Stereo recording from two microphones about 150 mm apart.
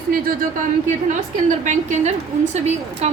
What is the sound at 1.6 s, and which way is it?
Speech, 55° right (ahead or behind).